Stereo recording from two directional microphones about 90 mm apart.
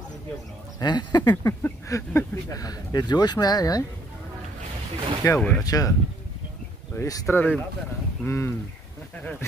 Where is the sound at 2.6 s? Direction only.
50° left (ahead or behind).